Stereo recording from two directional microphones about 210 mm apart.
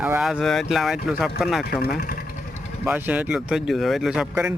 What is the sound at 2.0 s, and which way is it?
Speech, 45° left (ahead or behind).